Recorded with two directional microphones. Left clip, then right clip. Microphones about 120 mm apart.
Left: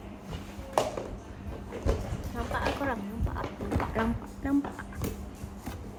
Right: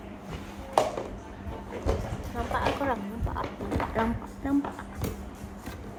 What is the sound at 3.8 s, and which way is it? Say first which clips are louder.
Music: right 3 dB; 30° left (ahead or behind).